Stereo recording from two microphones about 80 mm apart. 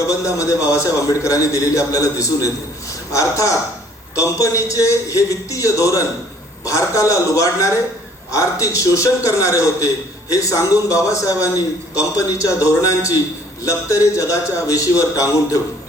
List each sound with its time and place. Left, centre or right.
0.1 s a man's voice: left